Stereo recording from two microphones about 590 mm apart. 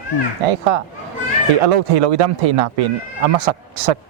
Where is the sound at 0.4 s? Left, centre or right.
Right.